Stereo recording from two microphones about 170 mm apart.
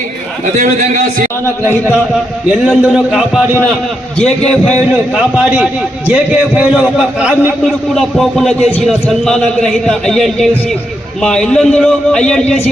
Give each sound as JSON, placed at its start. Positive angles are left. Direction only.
{"t": 0.6, "sound": "a man's voice", "side_deg": -50}
{"t": 2.5, "sound": "a man's voice", "side_deg": -5}
{"t": 5.1, "sound": "a man's voice", "side_deg": -5}